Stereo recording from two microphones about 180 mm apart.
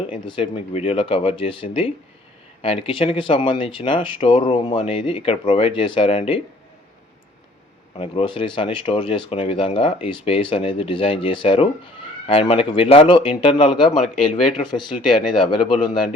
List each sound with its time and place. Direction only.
0.1 s speech: 30° left (ahead or behind)
7.9 s speech: 30° left (ahead or behind)
15.1 s speech: 25° left (ahead or behind)